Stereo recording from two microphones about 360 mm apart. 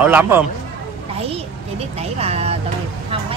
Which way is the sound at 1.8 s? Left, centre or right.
Centre.